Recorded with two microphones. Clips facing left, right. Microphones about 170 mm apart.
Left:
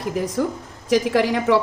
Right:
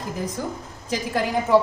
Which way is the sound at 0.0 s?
75° left (ahead or behind).